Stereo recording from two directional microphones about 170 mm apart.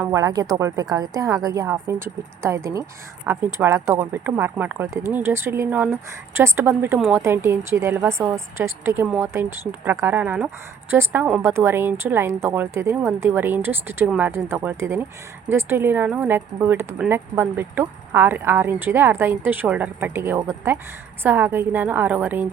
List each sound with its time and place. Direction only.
0.0 s a woman's voice: 20° right (ahead or behind)